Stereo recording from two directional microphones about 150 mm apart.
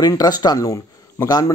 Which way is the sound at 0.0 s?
25° left (ahead or behind).